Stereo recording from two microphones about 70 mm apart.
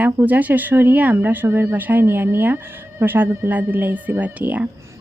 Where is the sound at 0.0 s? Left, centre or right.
Right.